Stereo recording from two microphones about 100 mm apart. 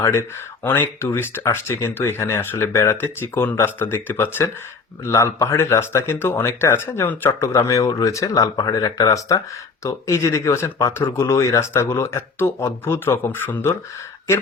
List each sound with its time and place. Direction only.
0.0 s speech: 25° left (ahead or behind)